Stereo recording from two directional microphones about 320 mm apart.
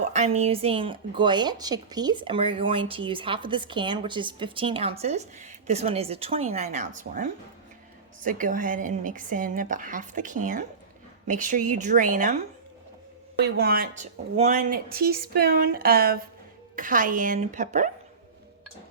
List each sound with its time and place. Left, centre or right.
0.1 s a woman's voice: centre
13.4 s a woman's voice: right